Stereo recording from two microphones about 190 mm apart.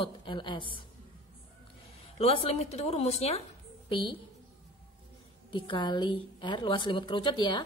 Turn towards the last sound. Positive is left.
turn(degrees=25)  # may be behind; listen again after turning